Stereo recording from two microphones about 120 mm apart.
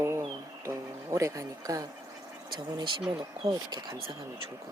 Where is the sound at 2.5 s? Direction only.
40° right (ahead or behind).